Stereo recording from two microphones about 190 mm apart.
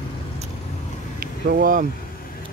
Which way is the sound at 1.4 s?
45° right (ahead or behind).